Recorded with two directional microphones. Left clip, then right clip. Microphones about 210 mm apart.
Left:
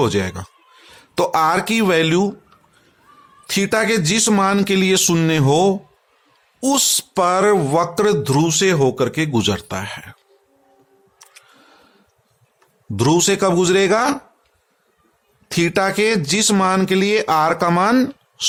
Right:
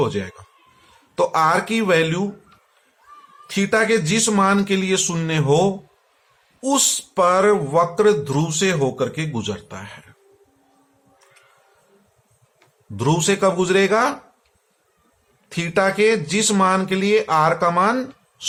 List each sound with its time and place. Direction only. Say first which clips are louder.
0.0 s speech: left 4 dB; 50° left (ahead or behind)
3.4 s speech: left 1 dB; 45° left (ahead or behind)
13.0 s speech: left 3 dB; 45° left (ahead or behind)
15.4 s speech: left 2 dB; 50° left (ahead or behind)